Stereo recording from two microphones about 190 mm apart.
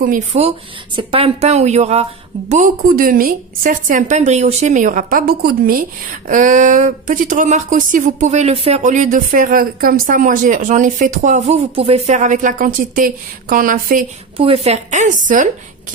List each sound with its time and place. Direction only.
0.0 s a woman's voice: 45° right (ahead or behind)
0.9 s a woman's voice: 30° right (ahead or behind); by 14.0 s 45° right (ahead or behind)
14.3 s a woman's voice: 30° right (ahead or behind)